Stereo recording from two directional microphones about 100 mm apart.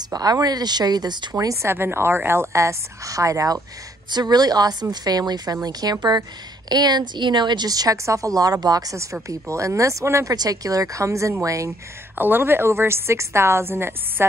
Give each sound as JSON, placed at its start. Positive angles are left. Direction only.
{"t": 0.1, "sound": "a woman's voice", "side_deg": -40}
{"t": 4.1, "sound": "a woman's voice", "side_deg": -45}
{"t": 12.2, "sound": "a woman's voice", "side_deg": -20}